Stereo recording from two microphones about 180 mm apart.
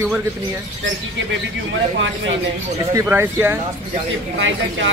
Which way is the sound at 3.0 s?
15° right (ahead or behind).